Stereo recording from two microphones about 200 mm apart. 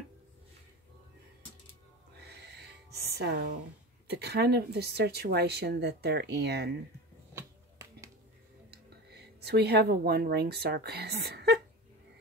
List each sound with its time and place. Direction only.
2.1 s music: 55° right (ahead or behind)
4.1 s a woman's voice: 55° right (ahead or behind)
7.3 s finger snapping: 15° right (ahead or behind)
8.6 s a woman's voice: 55° right (ahead or behind)